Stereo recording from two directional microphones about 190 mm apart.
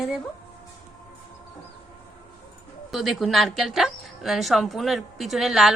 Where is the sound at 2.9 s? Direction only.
Centre (ahead or behind).